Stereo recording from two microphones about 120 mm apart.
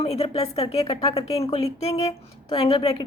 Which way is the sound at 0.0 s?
60° left (ahead or behind).